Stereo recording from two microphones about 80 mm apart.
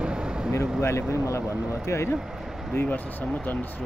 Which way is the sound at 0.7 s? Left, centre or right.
Left.